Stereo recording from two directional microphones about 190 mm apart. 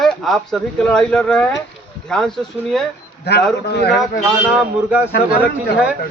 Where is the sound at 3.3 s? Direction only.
60° left (ahead or behind).